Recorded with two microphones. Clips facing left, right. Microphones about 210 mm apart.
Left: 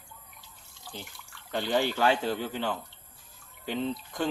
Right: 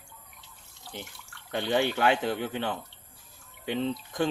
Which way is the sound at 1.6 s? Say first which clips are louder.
Right 1 dB; 20° right (ahead or behind).